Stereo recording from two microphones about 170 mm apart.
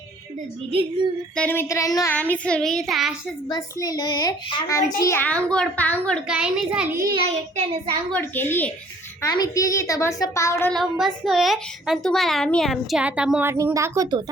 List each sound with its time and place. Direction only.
1.4 s a child's voice: 10° left (ahead or behind)
2.1 s a child's voice: 10° left (ahead or behind)
3.5 s a woman's voice: 20° left (ahead or behind); by 6.3 s 5° left (ahead or behind)
6.3 s a child's voice: 5° right (ahead or behind)
6.9 s a child's voice: 20° right (ahead or behind)
7.3 s child singing: 40° right (ahead or behind)
8.1 s a child's voice: 10° left (ahead or behind)
10.6 s a child's voice: 5° left (ahead or behind); by 14.2 s 20° right (ahead or behind)